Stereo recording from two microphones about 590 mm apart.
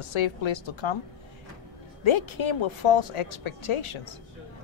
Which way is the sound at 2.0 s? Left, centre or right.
Left.